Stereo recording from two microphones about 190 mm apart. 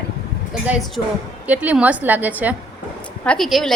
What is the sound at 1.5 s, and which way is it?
A woman's voice, 5° right (ahead or behind).